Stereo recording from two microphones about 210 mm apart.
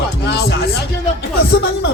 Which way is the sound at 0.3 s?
55° left (ahead or behind).